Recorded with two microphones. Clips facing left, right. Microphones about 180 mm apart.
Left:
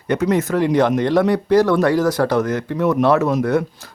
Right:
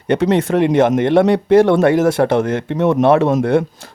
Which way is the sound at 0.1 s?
30° right (ahead or behind).